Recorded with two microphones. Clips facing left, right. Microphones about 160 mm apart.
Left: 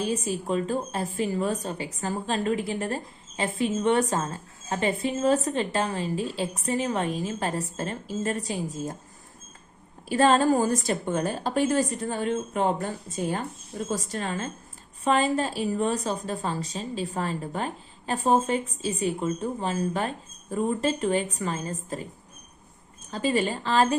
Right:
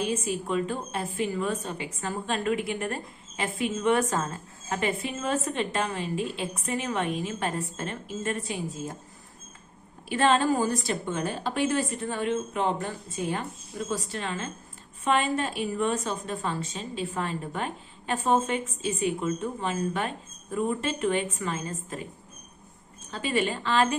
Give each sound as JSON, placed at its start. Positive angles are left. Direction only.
{"t": 0.0, "sound": "a woman's voice", "side_deg": 35}
{"t": 10.1, "sound": "a woman's voice", "side_deg": 40}
{"t": 23.1, "sound": "a woman's voice", "side_deg": 40}